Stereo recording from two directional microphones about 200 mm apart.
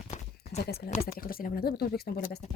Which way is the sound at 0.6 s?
50° left (ahead or behind).